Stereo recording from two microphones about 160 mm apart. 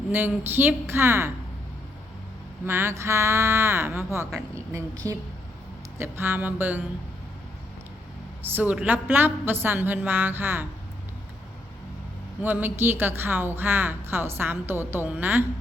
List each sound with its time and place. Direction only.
0.1 s speech: 10° right (ahead or behind)
2.6 s a woman's voice: 15° right (ahead or behind)
8.4 s speech: 10° right (ahead or behind)
12.4 s speech: 10° right (ahead or behind)